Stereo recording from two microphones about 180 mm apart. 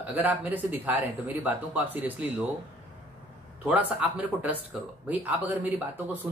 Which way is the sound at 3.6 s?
10° right (ahead or behind).